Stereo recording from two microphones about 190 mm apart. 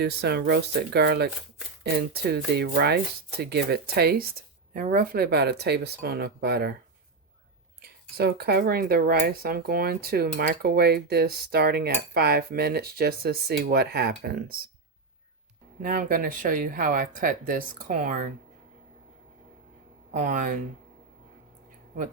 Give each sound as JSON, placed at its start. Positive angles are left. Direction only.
{"t": 0.0, "sound": "speech", "side_deg": -60}
{"t": 7.8, "sound": "speech", "side_deg": -55}
{"t": 15.8, "sound": "speech", "side_deg": -50}
{"t": 20.1, "sound": "speech", "side_deg": -40}